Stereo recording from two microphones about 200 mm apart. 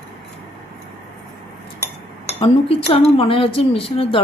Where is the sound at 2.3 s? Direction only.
30° left (ahead or behind).